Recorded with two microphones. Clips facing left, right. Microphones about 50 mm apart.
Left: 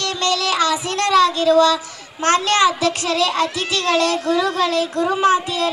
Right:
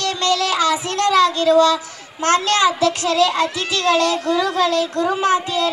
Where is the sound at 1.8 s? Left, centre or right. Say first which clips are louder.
Right 1 dB; left.